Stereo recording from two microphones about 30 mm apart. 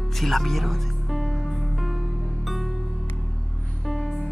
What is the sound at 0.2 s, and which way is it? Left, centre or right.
Music, centre.